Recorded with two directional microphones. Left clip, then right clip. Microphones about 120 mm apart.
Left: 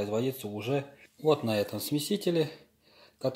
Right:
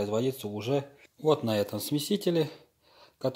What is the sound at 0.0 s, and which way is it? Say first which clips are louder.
Speech: right 2 dB; 25° right (ahead or behind).